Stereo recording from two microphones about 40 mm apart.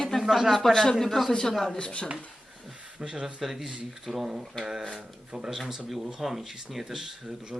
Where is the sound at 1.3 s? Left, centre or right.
Centre.